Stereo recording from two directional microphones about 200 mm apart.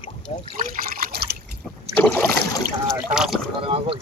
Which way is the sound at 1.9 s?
10° left (ahead or behind).